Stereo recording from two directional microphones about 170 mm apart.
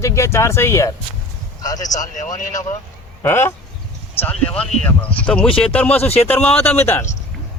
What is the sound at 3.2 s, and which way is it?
A man's voice, 15° left (ahead or behind).